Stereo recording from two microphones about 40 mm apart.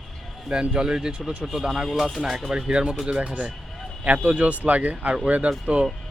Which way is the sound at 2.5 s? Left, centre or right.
Centre.